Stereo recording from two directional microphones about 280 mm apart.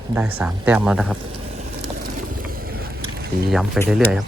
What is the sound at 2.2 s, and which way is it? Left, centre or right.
Boat, right.